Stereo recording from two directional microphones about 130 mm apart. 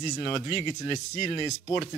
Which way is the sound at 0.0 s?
35° left (ahead or behind).